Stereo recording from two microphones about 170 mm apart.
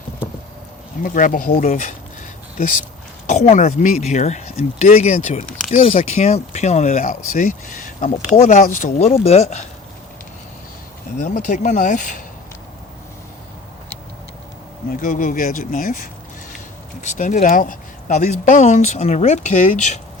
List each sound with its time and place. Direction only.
1.0 s speech: 50° left (ahead or behind)
11.2 s speech: 50° left (ahead or behind)
14.8 s speech: 55° left (ahead or behind)